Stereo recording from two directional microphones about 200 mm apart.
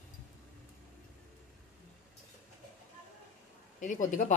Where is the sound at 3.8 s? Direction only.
40° left (ahead or behind).